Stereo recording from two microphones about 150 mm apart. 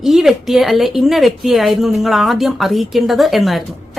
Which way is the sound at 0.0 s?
Centre (ahead or behind).